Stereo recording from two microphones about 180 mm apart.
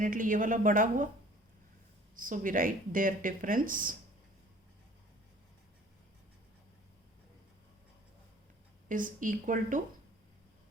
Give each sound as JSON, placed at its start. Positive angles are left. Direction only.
{"t": 0.0, "sound": "speech", "side_deg": -45}
{"t": 2.1, "sound": "speech", "side_deg": -50}
{"t": 8.9, "sound": "speech", "side_deg": -45}